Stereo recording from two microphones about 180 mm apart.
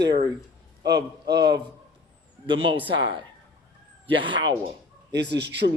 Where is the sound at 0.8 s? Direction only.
65° right (ahead or behind).